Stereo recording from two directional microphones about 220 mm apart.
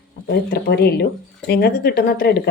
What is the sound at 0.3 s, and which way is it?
Speech, 45° left (ahead or behind).